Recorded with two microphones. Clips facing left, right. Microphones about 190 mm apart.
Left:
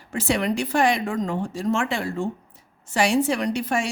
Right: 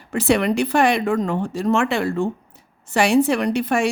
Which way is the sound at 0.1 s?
65° right (ahead or behind).